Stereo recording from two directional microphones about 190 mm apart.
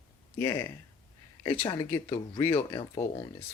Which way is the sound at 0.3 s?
15° left (ahead or behind).